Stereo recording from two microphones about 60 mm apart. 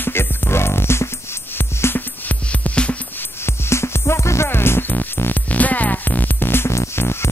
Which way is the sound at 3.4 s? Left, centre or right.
Left.